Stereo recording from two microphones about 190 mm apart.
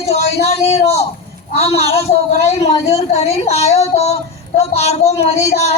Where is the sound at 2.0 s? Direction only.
35° left (ahead or behind).